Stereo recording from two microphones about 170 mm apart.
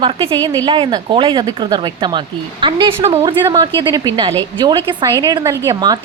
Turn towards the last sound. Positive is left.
turn(degrees=-25)  # may be behind; listen again after turning